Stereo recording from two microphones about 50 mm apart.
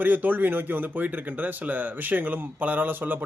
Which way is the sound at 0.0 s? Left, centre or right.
Right.